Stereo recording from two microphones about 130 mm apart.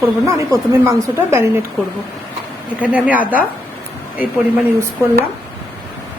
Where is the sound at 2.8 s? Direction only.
10° right (ahead or behind).